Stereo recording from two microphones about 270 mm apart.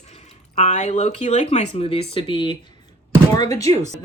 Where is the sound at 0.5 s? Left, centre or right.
Left.